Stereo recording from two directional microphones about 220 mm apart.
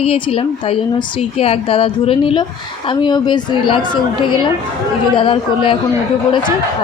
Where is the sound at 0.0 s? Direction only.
25° left (ahead or behind).